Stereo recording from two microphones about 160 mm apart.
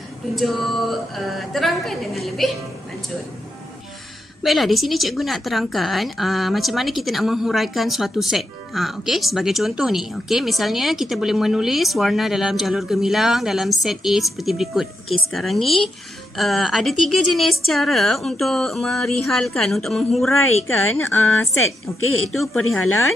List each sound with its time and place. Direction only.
0.4 s a woman's voice: centre (ahead or behind)
4.4 s a woman's voice: centre (ahead or behind)
20.9 s speech: 15° left (ahead or behind)
22.3 s a woman's voice: centre (ahead or behind)